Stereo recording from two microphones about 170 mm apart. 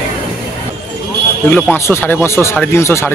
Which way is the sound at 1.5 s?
15° left (ahead or behind).